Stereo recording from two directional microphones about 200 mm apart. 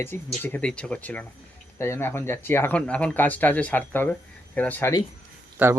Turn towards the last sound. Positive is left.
turn(degrees=-10)  # may be behind; listen again after turning